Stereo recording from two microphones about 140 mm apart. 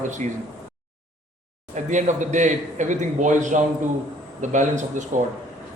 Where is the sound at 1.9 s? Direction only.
60° right (ahead or behind).